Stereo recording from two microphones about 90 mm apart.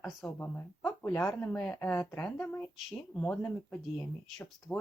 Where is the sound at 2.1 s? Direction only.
10° left (ahead or behind).